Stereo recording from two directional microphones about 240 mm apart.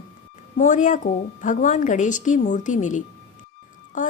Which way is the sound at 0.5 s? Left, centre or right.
Left.